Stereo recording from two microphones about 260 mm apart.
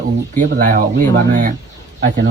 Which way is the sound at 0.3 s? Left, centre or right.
Right.